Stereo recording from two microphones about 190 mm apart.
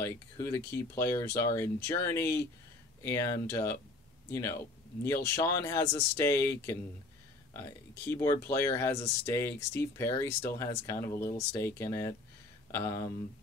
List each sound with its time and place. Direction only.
0.0 s speech: 10° left (ahead or behind)